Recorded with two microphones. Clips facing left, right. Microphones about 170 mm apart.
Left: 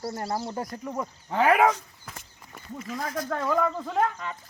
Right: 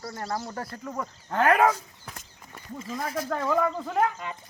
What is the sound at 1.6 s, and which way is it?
Speech, 10° right (ahead or behind).